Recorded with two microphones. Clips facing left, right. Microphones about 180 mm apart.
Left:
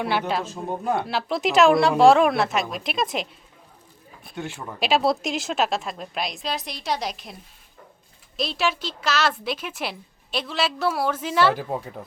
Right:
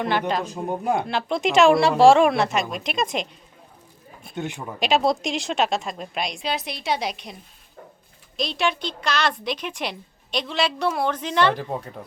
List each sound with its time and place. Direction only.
0.0 s speech: 5° left (ahead or behind)
0.4 s speech: 15° right (ahead or behind)
1.0 s a woman's voice: 5° left (ahead or behind)
4.4 s speech: 15° right (ahead or behind)
4.8 s a woman's voice: 5° left (ahead or behind)
8.4 s a woman's voice: 5° left (ahead or behind)